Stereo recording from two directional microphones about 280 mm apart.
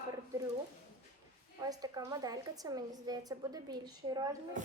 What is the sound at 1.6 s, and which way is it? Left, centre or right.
A woman's voice, centre.